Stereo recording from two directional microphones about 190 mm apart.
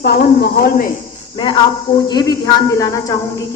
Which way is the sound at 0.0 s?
60° left (ahead or behind).